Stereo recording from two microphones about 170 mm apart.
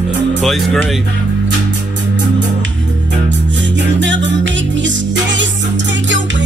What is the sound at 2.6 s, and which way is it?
Music, 90° right.